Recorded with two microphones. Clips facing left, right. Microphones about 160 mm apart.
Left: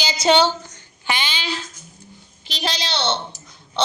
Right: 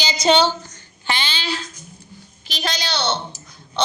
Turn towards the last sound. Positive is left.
turn(degrees=25)  # may be behind; listen again after turning